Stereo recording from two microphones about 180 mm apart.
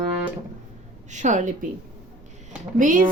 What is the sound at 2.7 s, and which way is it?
Speech, 45° right (ahead or behind).